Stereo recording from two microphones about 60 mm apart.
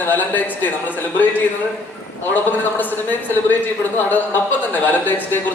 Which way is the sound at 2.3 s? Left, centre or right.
Left.